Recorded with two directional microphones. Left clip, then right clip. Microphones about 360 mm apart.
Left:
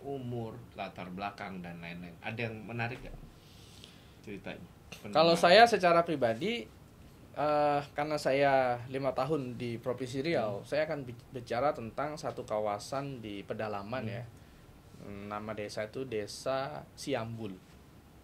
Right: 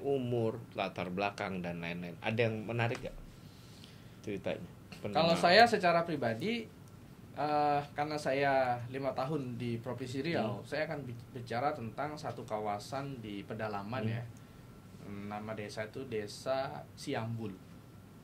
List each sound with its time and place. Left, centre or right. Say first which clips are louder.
0.1 s speech: right 7 dB; right
4.2 s speech: right 6 dB; right
5.1 s speech: left 3 dB; left